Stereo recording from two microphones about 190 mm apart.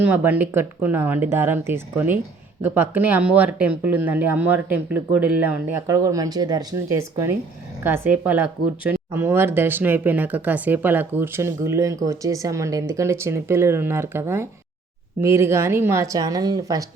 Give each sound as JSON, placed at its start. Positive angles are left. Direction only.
{"t": 0.0, "sound": "speech", "side_deg": -10}